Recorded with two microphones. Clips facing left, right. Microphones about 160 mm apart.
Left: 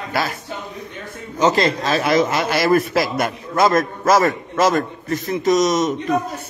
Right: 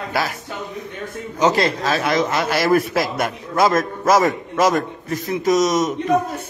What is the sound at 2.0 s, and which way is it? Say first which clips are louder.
A man's voice: left 3 dB; 5° left (ahead or behind).